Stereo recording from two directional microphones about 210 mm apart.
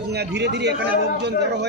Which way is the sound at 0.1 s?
50° right (ahead or behind).